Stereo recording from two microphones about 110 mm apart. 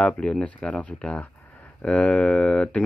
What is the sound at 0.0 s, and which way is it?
Speech, 10° left (ahead or behind).